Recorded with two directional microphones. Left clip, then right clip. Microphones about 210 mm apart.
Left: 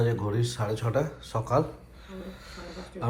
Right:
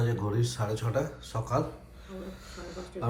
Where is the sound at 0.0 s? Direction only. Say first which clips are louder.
Left 3 dB; 15° right (ahead or behind).